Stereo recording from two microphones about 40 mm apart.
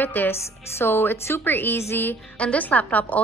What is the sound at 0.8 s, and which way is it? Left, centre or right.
A woman's voice, left.